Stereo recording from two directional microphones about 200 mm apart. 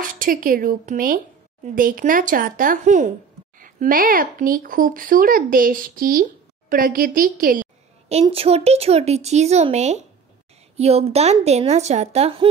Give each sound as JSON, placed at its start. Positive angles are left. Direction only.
{"t": 0.0, "sound": "a woman's voice", "side_deg": -45}
{"t": 8.1, "sound": "speech", "side_deg": -30}